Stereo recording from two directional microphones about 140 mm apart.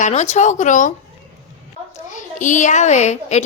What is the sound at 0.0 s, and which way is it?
Speech, 55° left (ahead or behind).